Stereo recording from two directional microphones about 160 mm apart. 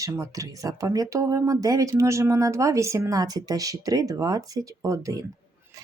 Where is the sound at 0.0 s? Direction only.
20° right (ahead or behind).